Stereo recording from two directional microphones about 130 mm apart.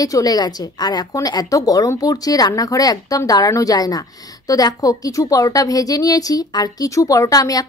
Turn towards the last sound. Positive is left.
turn(degrees=30)  # may be behind; listen again after turning